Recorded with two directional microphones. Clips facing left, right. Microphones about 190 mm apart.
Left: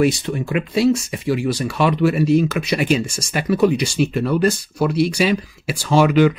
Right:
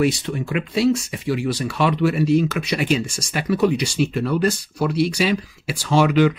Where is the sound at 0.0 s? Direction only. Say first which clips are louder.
Left 2 dB; 45° left (ahead or behind).